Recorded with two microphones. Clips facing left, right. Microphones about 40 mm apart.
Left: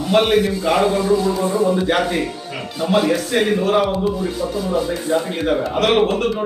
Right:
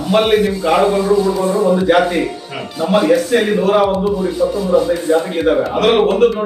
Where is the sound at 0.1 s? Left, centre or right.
Centre.